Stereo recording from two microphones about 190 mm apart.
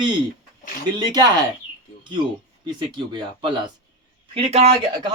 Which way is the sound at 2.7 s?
25° right (ahead or behind).